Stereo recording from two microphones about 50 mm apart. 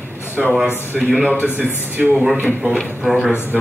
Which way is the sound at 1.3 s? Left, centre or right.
Left.